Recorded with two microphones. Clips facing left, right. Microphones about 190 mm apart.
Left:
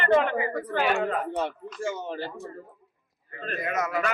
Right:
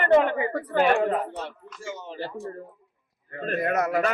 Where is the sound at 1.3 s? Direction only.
55° left (ahead or behind).